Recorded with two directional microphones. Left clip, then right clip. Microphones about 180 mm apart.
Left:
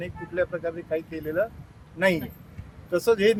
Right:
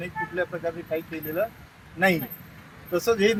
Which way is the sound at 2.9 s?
25° left (ahead or behind).